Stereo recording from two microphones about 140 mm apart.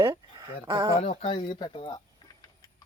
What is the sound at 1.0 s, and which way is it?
Speech, 50° left (ahead or behind).